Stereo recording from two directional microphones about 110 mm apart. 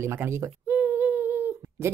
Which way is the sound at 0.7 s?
15° right (ahead or behind).